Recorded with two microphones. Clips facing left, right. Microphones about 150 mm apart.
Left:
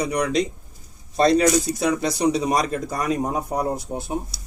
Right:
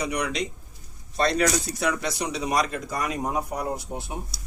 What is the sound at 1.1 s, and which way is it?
Speech, 35° left (ahead or behind).